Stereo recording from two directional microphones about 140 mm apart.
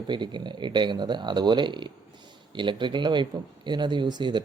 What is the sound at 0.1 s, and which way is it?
Speech, 35° right (ahead or behind).